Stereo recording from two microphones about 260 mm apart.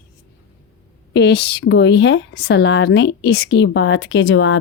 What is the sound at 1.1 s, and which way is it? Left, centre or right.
Speech, left.